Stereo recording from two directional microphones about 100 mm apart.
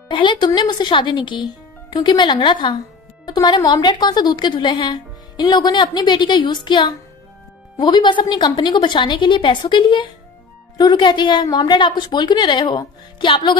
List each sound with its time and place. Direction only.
0.1 s a woman's voice: 50° left (ahead or behind)